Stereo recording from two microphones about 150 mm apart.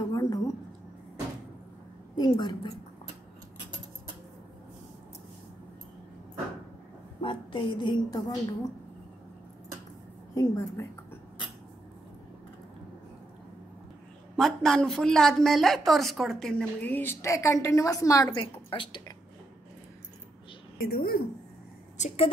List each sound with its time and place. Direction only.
0.0 s a sound: 25° left (ahead or behind)
2.1 s a woman's voice: 30° left (ahead or behind)
7.2 s a woman's voice: 35° left (ahead or behind)
10.3 s a woman's voice: 20° left (ahead or behind)
14.3 s a woman's voice: 5° left (ahead or behind); by 19.1 s 30° left (ahead or behind)
20.7 s a woman's voice: 85° left
21.9 s a woman's voice: 45° left (ahead or behind)